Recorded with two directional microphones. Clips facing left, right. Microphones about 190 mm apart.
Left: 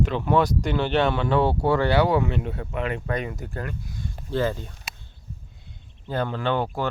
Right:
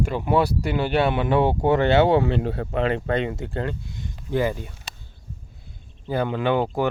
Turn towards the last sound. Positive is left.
turn(degrees=-15)  # may be behind; listen again after turning